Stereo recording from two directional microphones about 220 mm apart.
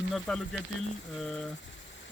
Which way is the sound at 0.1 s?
Centre (ahead or behind).